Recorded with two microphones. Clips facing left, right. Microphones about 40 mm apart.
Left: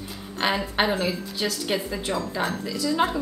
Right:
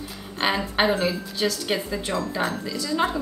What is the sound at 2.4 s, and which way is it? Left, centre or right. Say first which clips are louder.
Speech: right 1 dB; centre.